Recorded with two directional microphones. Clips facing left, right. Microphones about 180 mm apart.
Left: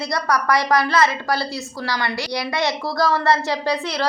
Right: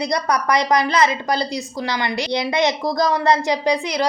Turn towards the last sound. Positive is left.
turn(degrees=-15)  # may be behind; listen again after turning